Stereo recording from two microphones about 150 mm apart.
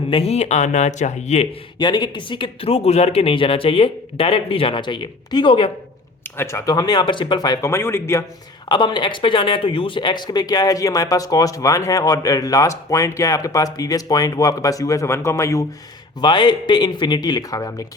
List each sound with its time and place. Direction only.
0.1 s speech: 45° left (ahead or behind)
1.8 s speech: 30° left (ahead or behind)
6.2 s speech: 15° left (ahead or behind)
8.7 s speech: 30° left (ahead or behind)